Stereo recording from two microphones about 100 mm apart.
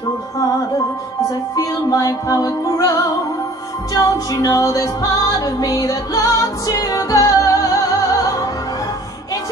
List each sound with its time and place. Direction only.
1.5 s music: 35° left (ahead or behind)